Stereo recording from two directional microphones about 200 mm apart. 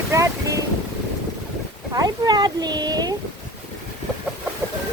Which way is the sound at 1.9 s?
20° right (ahead or behind).